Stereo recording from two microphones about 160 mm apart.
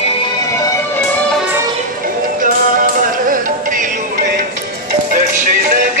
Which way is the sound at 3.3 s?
60° right (ahead or behind).